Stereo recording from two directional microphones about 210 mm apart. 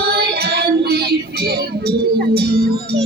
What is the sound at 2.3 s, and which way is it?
Music, 50° right (ahead or behind).